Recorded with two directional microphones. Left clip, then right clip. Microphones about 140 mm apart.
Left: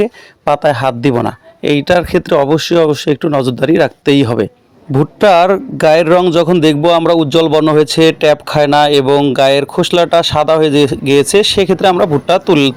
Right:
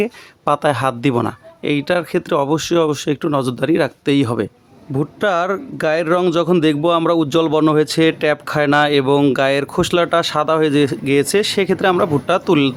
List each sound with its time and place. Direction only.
0.0 s a man's voice: 15° left (ahead or behind)